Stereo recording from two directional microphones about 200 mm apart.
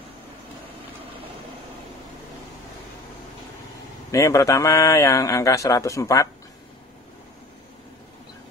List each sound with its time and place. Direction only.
4.1 s a man's voice: 15° left (ahead or behind)